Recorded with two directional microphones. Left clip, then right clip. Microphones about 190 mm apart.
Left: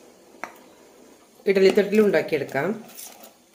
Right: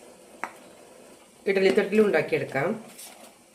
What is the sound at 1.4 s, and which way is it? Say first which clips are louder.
Speech: left 4 dB; 25° left (ahead or behind).